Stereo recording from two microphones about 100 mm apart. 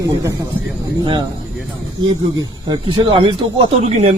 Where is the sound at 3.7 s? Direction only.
90° right.